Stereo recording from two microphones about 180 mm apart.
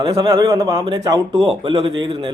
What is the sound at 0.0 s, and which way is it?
A man's voice, 25° right (ahead or behind).